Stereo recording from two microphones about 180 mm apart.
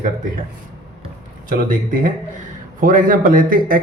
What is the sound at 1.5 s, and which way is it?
Speech, 50° right (ahead or behind).